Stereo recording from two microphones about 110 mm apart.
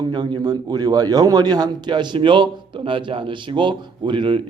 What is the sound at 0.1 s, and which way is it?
A man's voice, 40° right (ahead or behind).